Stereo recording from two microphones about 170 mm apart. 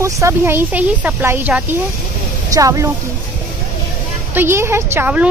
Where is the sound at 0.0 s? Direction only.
15° right (ahead or behind).